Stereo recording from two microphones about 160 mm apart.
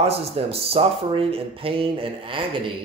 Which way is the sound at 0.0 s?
40° right (ahead or behind).